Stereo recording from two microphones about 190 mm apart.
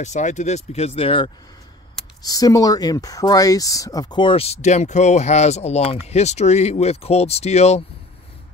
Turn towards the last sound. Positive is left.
turn(degrees=35)  # may be behind; listen again after turning